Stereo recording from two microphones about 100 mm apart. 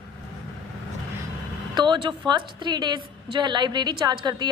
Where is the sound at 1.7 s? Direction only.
50° right (ahead or behind).